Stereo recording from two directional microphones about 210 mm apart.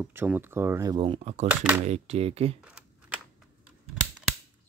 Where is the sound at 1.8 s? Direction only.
30° right (ahead or behind).